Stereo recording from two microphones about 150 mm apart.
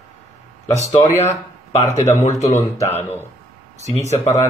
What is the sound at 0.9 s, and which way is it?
Speech, 25° left (ahead or behind).